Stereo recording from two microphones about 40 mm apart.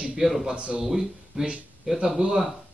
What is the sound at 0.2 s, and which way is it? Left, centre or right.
Speech, centre.